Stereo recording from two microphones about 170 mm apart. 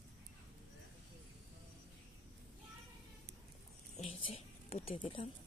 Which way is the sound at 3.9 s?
35° left (ahead or behind).